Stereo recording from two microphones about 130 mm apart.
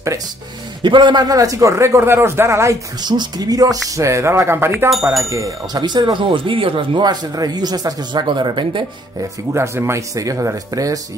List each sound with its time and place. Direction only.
0.8 s a man's voice: 35° right (ahead or behind)
9.5 s a man's voice: 20° right (ahead or behind)